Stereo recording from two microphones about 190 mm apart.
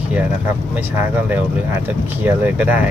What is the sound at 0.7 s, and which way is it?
Speech, 10° right (ahead or behind).